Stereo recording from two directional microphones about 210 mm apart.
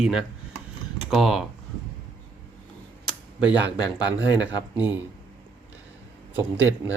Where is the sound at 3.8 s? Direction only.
20° left (ahead or behind).